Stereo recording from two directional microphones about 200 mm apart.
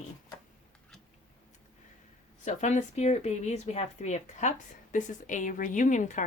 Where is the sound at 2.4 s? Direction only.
35° left (ahead or behind).